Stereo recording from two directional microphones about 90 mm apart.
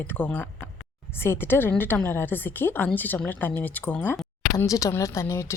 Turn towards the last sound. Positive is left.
turn(degrees=30)  # may be behind; listen again after turning